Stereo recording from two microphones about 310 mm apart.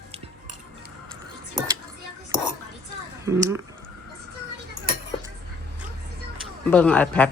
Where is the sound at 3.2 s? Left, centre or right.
Centre.